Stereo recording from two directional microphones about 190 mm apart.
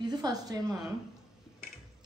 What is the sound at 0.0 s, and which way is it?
Speech, 20° right (ahead or behind).